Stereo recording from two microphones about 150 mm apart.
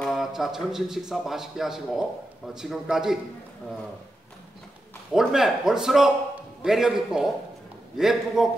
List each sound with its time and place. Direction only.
0.0 s a man's voice: centre (ahead or behind)
5.1 s a man's voice: 5° right (ahead or behind)